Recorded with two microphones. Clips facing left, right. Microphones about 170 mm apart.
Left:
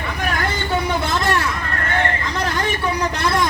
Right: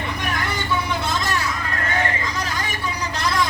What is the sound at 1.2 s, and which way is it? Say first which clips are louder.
Vehicle: left 4 dB; 60° left (ahead or behind).